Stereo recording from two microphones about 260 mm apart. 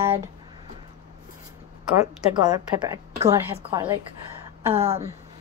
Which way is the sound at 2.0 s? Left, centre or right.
Centre.